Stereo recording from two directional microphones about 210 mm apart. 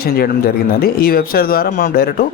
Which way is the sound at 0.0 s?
45° left (ahead or behind).